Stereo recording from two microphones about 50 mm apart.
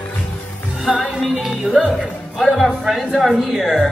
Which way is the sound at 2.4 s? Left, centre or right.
Centre.